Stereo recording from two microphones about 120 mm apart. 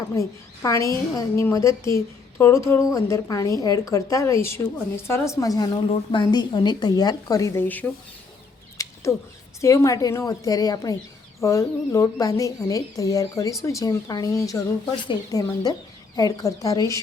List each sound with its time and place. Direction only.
0.1 s a woman's voice: 25° left (ahead or behind)
8.8 s a sound: 25° left (ahead or behind)
9.6 s a woman's voice: 25° left (ahead or behind)
15.0 s a woman's voice: 40° left (ahead or behind)